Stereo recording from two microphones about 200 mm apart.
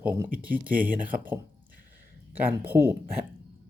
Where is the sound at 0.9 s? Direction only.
45° right (ahead or behind).